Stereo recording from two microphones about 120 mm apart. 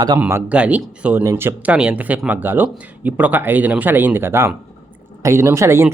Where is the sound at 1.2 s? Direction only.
20° right (ahead or behind).